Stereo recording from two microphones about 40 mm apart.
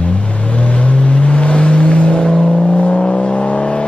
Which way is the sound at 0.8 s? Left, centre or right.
Left.